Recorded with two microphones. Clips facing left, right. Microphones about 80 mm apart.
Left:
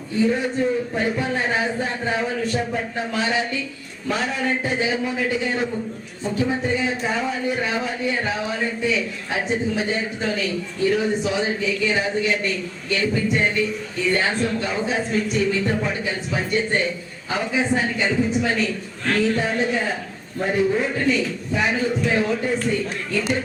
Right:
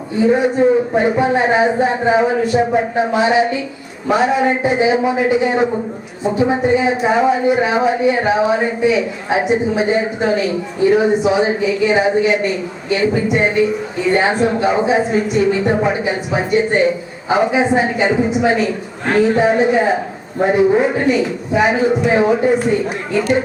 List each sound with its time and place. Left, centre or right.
0.2 s a man's voice: right